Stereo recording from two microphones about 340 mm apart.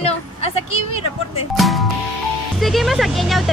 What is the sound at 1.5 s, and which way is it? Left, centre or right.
Speech, centre.